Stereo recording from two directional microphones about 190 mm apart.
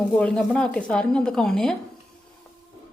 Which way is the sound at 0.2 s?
5° left (ahead or behind).